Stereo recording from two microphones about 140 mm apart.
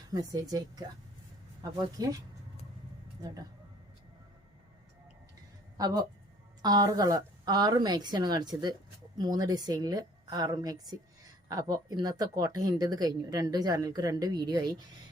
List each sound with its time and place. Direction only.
0.1 s a woman's voice: 25° right (ahead or behind)
2.0 s a woman's voice: 25° right (ahead or behind)
3.2 s speech: 25° right (ahead or behind)
5.7 s a woman's voice: 25° right (ahead or behind)